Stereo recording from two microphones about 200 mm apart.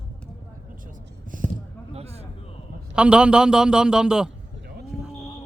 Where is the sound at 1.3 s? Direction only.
45° right (ahead or behind).